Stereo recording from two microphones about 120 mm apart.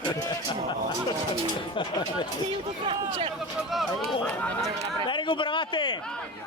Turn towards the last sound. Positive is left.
turn(degrees=40)  # may be behind; listen again after turning